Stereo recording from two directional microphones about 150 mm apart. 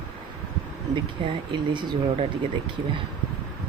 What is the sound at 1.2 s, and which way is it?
Speech, 35° right (ahead or behind).